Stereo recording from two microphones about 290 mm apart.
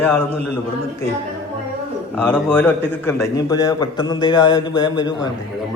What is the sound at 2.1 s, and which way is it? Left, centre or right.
A man's voice, centre.